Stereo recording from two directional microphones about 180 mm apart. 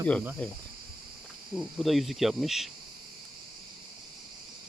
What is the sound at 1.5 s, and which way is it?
Cricket, centre (ahead or behind).